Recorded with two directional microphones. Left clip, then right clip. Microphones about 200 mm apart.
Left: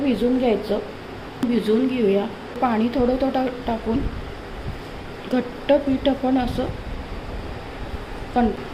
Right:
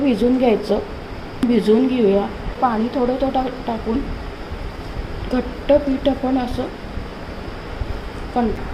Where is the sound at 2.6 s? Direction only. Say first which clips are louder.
Right 3 dB; 10° left (ahead or behind).